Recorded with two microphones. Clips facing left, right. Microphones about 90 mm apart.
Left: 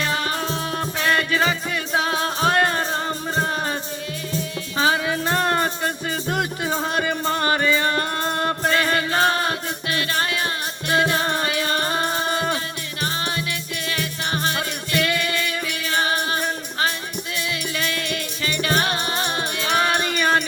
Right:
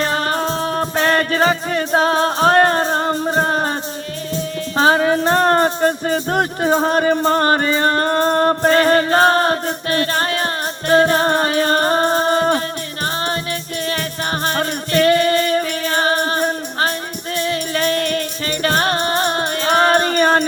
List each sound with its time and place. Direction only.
0.0 s music: 40° right (ahead or behind)
4.8 s music: 40° right (ahead or behind)